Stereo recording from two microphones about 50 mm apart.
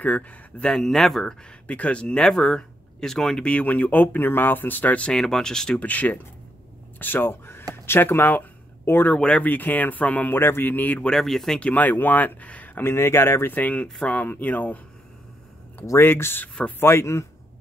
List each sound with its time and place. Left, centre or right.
0.6 s speech: centre
1.7 s speech: left
2.2 s speech: centre
3.4 s speech: left
5.1 s speech: centre
5.8 s speech: left
10.3 s speech: left
11.1 s speech: centre
11.6 s speech: left
12.8 s speech: left
13.5 s speech: left
16.0 s speech: left
16.8 s speech: left